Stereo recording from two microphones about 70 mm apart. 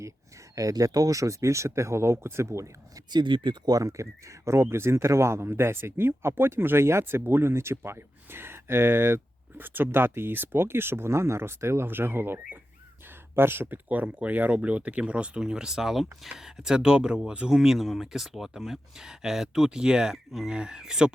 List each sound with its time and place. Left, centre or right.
0.5 s speech: right
3.1 s speech: right
13.8 s speech: right